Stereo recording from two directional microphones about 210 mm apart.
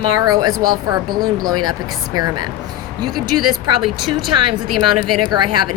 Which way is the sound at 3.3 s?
90° right.